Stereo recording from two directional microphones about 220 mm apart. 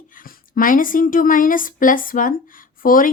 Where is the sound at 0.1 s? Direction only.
40° left (ahead or behind).